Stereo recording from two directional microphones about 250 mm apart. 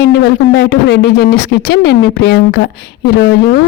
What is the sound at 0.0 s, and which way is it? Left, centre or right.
Speech, left.